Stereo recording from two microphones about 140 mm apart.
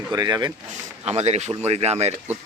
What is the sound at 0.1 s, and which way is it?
Speech, 25° right (ahead or behind).